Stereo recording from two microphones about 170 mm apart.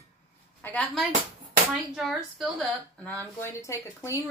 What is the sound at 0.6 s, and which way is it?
Speech, 5° left (ahead or behind).